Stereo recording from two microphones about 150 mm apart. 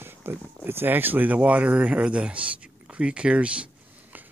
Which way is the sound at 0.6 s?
15° right (ahead or behind).